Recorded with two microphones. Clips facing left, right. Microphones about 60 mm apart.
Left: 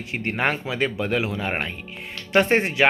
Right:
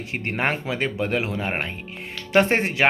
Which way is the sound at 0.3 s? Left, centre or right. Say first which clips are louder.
Left 1 dB; right.